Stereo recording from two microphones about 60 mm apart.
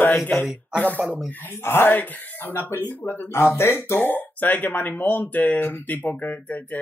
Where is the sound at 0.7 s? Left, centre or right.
Left.